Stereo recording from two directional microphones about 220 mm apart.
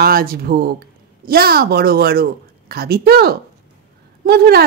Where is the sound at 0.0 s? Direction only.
40° right (ahead or behind).